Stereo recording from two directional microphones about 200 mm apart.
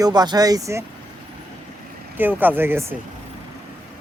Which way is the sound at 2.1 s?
10° right (ahead or behind).